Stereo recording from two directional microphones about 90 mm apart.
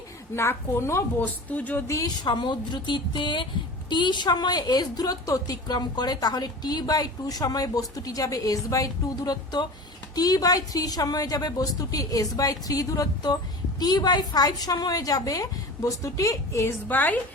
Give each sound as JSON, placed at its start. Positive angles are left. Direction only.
{"t": 0.3, "sound": "a woman's voice", "side_deg": 30}
{"t": 1.2, "sound": "speech", "side_deg": 20}
{"t": 1.9, "sound": "a woman's voice", "side_deg": 45}
{"t": 16.9, "sound": "a woman's voice", "side_deg": 20}